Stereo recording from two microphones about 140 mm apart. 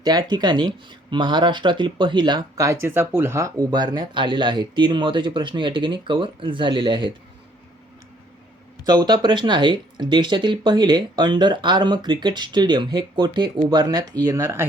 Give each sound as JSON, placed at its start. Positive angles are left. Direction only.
{"t": 0.0, "sound": "speech", "side_deg": -30}
{"t": 2.6, "sound": "speech", "side_deg": -15}
{"t": 8.8, "sound": "speech", "side_deg": -30}